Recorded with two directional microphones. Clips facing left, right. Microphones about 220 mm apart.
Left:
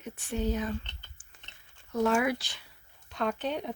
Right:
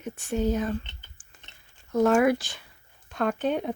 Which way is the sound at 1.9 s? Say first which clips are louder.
Right 6 dB; 50° right (ahead or behind).